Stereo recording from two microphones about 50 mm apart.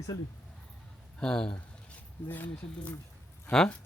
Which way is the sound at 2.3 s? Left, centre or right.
Left.